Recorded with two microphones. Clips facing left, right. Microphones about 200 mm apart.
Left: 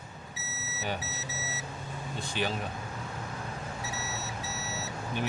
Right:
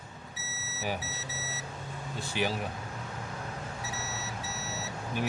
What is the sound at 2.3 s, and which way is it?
Speech, 10° right (ahead or behind).